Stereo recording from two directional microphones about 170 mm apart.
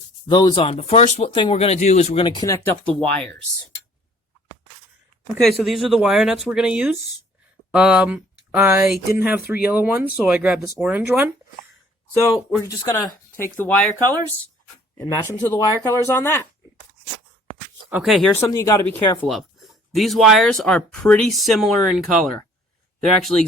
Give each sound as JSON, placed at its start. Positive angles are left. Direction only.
{"t": 0.3, "sound": "speech", "side_deg": 25}
{"t": 3.0, "sound": "speech", "side_deg": 10}
{"t": 5.4, "sound": "speech", "side_deg": 0}
{"t": 12.6, "sound": "speech", "side_deg": 20}
{"t": 14.9, "sound": "speech", "side_deg": 20}
{"t": 17.9, "sound": "speech", "side_deg": 0}
{"t": 18.3, "sound": "speech", "side_deg": 15}
{"t": 19.3, "sound": "speech", "side_deg": 0}